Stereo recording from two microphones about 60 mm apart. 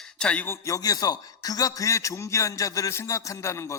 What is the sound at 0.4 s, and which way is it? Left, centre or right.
Speech, left.